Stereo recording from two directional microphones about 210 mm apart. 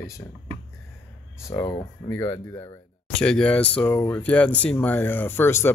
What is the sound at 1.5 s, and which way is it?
Speech, 20° left (ahead or behind).